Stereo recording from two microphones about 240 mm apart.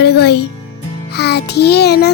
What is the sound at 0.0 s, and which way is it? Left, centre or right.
Music, left.